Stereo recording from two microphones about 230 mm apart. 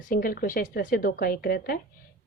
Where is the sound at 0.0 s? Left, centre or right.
Left.